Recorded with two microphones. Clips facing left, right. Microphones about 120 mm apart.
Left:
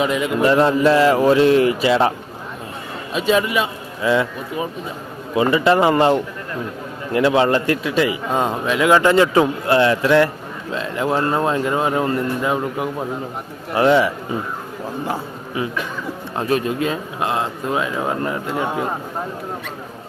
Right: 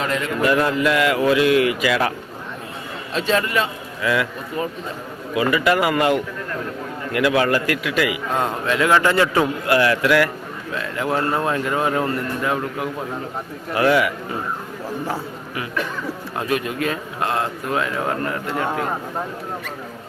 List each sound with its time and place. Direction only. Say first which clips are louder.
0.0 s a man's voice: left 4 dB; 15° left (ahead or behind)
0.4 s speech: left 4 dB; 30° left (ahead or behind)
3.1 s a man's voice: left 3 dB; 15° left (ahead or behind)
4.0 s a man's voice: left 3 dB; 25° left (ahead or behind)
5.3 s a man's voice: left 3 dB; 30° left (ahead or behind)
8.3 s a man's voice: left 2 dB; 15° left (ahead or behind)